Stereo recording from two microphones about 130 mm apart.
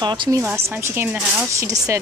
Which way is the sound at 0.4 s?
15° right (ahead or behind).